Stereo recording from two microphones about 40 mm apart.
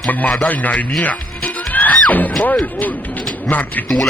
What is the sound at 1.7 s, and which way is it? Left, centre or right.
Music, left.